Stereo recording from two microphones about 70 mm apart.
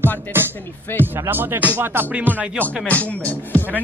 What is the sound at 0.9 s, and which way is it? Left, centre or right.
Speech, left.